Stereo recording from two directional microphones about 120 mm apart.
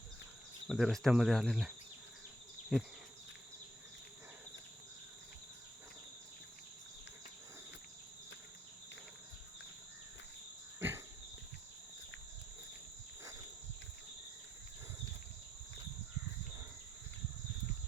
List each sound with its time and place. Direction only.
0.7 s speech: centre (ahead or behind)
2.7 s speech: centre (ahead or behind)
10.8 s a sound: 20° right (ahead or behind)